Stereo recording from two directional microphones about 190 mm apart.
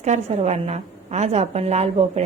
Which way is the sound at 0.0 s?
35° right (ahead or behind).